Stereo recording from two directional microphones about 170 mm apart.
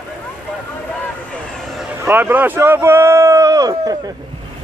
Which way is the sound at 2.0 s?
10° right (ahead or behind).